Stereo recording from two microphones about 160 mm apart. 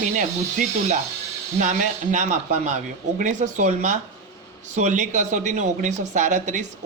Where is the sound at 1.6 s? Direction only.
50° right (ahead or behind).